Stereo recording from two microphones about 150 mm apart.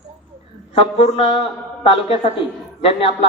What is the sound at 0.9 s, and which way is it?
A man's voice, 45° left (ahead or behind).